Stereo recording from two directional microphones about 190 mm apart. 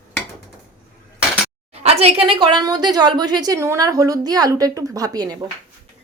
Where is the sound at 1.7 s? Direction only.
35° right (ahead or behind).